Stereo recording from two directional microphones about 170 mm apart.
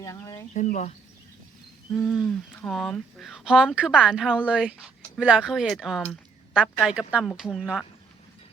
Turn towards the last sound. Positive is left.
turn(degrees=-5)  # may be behind; listen again after turning